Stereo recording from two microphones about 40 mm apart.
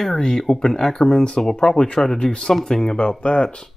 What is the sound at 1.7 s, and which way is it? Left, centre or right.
Speech, left.